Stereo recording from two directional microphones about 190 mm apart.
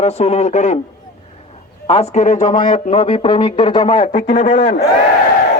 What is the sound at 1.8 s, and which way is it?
Speech, 35° left (ahead or behind).